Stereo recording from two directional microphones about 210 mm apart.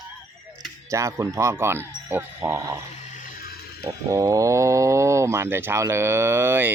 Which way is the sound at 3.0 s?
35° left (ahead or behind).